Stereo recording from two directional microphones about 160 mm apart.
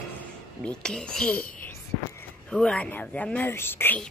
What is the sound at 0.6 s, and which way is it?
Whispering, 5° left (ahead or behind).